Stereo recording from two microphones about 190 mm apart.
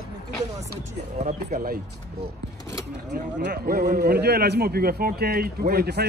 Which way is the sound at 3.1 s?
55° right (ahead or behind).